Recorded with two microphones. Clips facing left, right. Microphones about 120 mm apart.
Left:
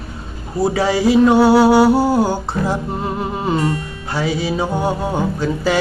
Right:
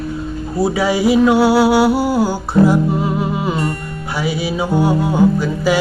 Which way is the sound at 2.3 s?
10° right (ahead or behind).